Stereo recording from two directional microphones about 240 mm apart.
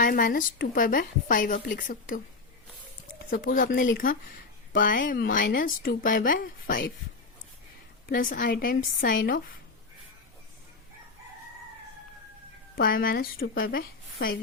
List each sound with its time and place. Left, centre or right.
0.0 s speech: left
3.2 s speech: left
8.0 s speech: left
12.7 s speech: left